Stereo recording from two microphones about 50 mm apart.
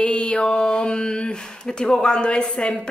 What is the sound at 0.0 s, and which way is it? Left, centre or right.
Mantra, left.